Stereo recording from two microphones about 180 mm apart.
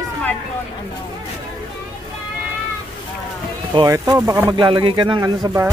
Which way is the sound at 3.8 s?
20° right (ahead or behind).